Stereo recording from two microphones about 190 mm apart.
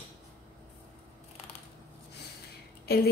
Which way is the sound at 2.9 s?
55° left (ahead or behind).